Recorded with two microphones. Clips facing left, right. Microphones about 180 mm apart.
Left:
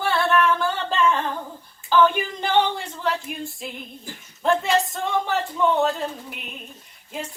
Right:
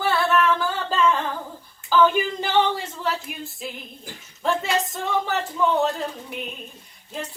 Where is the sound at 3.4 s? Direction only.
Centre (ahead or behind).